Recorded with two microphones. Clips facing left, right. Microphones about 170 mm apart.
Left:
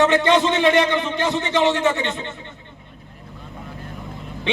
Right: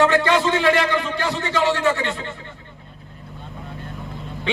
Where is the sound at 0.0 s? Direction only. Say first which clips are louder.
Left 1 dB; 20° left (ahead or behind).